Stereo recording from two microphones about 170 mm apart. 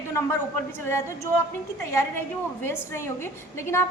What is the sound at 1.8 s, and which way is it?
Speech, 15° left (ahead or behind).